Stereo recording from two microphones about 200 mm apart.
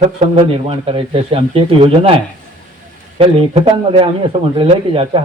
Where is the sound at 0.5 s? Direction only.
30° right (ahead or behind).